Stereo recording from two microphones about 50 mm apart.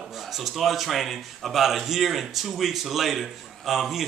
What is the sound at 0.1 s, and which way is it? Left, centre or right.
A man's voice, centre.